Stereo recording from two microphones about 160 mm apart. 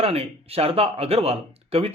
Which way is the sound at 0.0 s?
40° right (ahead or behind).